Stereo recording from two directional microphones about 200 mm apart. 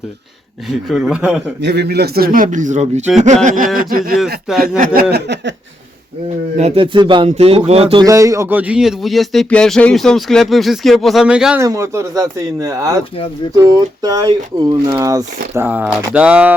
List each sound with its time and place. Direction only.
0.9 s speech: centre (ahead or behind)
1.6 s a man's voice: 55° right (ahead or behind); by 3.0 s 35° right (ahead or behind)
3.4 s a sound: 40° right (ahead or behind)
3.8 s a man's voice: 45° right (ahead or behind)
4.5 s speech: centre (ahead or behind)
5.1 s a sound: 60° right (ahead or behind)
6.6 s speech: 30° right (ahead or behind)
8.0 s speech: 15° right (ahead or behind)
11.6 s speech: 15° right (ahead or behind)